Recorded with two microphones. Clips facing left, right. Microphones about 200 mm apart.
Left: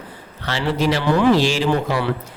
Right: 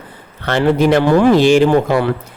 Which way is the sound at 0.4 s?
55° right (ahead or behind).